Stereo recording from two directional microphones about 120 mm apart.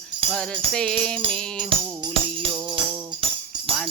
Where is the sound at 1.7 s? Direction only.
50° right (ahead or behind).